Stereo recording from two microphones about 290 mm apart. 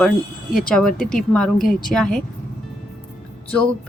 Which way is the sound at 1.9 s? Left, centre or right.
Centre.